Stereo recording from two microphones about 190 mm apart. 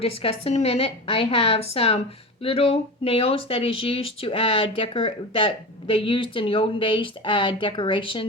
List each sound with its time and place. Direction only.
0.0 s a woman's voice: 30° left (ahead or behind)